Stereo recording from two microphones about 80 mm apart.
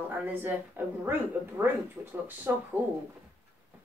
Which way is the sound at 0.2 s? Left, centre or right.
Right.